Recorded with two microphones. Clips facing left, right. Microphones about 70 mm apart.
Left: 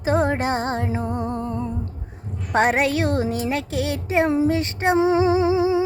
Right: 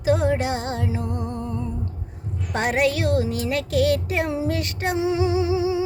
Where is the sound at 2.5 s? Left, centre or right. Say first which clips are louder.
Left 3 dB; left.